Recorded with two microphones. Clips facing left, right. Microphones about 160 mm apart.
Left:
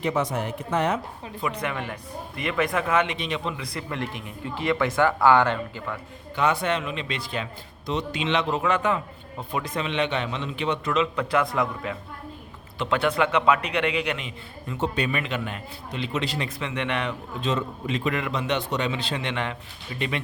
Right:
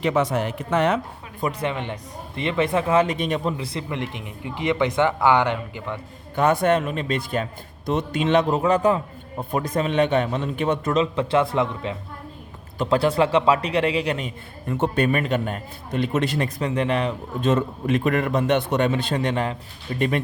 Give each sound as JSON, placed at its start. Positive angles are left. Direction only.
{"t": 0.0, "sound": "speech", "side_deg": -85}
{"t": 1.4, "sound": "speech", "side_deg": -35}
{"t": 3.2, "sound": "a man's voice", "side_deg": -45}
{"t": 3.6, "sound": "speech", "side_deg": -25}
{"t": 6.3, "sound": "a man's voice", "side_deg": -50}
{"t": 11.0, "sound": "a man's voice", "side_deg": -30}
{"t": 17.4, "sound": "a man's voice", "side_deg": -50}